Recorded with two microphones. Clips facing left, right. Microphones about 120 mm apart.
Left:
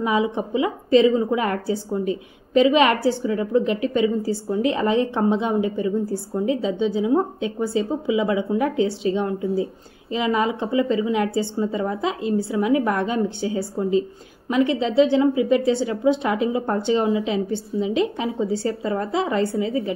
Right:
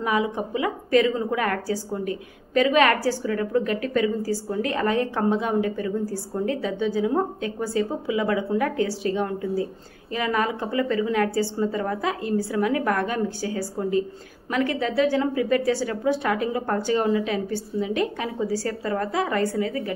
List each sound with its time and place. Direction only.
0.0 s a woman's voice: 25° left (ahead or behind)